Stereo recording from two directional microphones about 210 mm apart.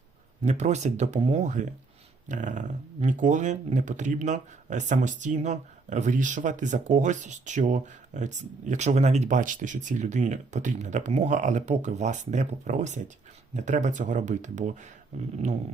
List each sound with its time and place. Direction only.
0.4 s speech: 35° right (ahead or behind)